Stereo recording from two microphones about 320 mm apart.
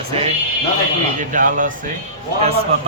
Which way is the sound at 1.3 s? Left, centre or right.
Right.